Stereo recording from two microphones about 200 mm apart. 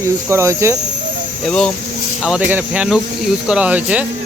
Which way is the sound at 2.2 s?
5° right (ahead or behind).